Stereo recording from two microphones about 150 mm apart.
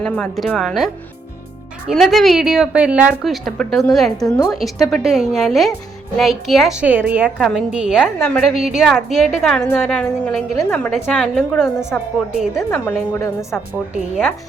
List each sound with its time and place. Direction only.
0.0 s a woman's voice: 5° left (ahead or behind)
1.9 s a woman's voice: centre (ahead or behind)
8.2 s a woman's voice: 5° left (ahead or behind)
9.6 s a woman's voice: 15° left (ahead or behind)